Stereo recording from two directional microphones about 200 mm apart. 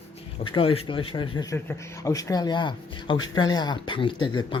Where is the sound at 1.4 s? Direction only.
15° left (ahead or behind).